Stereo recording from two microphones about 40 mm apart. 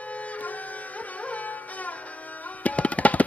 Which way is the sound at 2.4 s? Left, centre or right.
Left.